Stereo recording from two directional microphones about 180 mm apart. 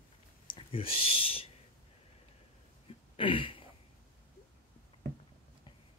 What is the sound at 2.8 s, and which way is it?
Throat clearing, 30° left (ahead or behind).